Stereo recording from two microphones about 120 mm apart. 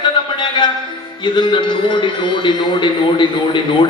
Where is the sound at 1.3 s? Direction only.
40° left (ahead or behind).